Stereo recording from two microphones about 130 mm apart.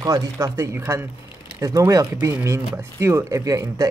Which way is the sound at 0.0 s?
25° right (ahead or behind).